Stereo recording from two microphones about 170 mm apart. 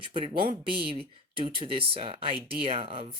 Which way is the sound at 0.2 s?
30° right (ahead or behind).